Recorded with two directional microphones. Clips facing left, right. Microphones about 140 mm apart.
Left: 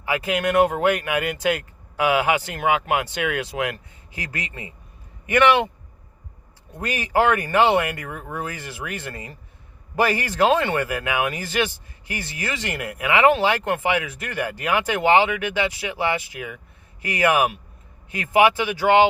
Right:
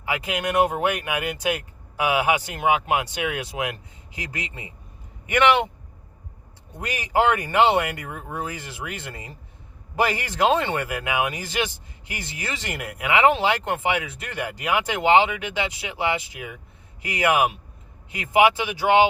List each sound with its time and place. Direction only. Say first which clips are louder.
0.0 s speech: left 4 dB; 15° right (ahead or behind)
6.7 s speech: left 1 dB; 15° right (ahead or behind)